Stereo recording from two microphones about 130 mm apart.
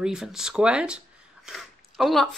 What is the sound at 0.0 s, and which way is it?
Speech, 5° right (ahead or behind).